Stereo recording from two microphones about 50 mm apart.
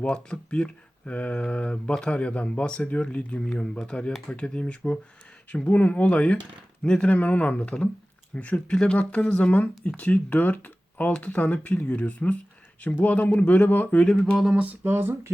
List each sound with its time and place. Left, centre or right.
0.0 s speech: centre; by 14.0 s left
14.0 s speech: left
14.5 s a sound: right
14.8 s speech: right